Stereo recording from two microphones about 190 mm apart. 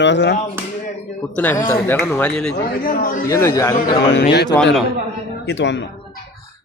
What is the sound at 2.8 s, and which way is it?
Speech, 50° left (ahead or behind).